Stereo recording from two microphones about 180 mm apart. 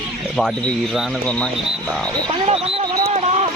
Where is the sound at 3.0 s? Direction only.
35° right (ahead or behind).